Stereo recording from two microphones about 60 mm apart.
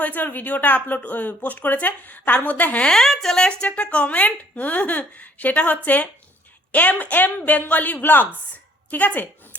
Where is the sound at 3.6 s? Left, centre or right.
Left.